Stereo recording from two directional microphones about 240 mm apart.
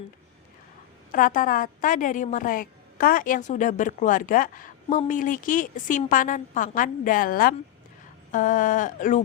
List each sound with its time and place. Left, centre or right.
1.1 s a woman's voice: left